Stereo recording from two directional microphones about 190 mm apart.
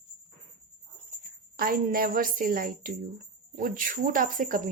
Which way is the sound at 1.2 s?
50° right (ahead or behind).